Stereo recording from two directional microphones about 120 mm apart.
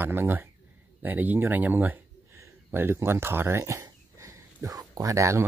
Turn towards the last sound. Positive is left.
turn(degrees=-25)  # may be behind; listen again after turning